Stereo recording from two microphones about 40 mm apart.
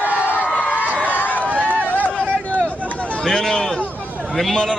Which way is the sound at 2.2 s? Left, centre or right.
Left.